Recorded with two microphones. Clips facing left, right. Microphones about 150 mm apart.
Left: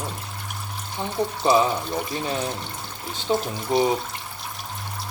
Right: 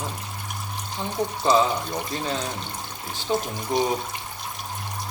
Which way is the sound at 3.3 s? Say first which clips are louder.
Left 2 dB; 20° left (ahead or behind).